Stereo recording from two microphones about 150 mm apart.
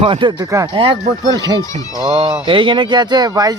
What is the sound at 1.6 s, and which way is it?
Speech, 25° left (ahead or behind).